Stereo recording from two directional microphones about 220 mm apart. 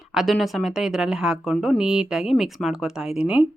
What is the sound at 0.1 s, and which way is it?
A woman's voice, centre (ahead or behind).